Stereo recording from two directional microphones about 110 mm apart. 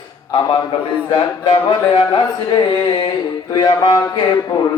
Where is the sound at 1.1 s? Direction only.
55° left (ahead or behind).